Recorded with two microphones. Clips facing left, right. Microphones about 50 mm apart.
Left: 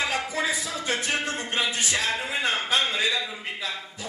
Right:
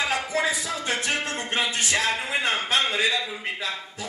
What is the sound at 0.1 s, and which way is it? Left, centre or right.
Music, right.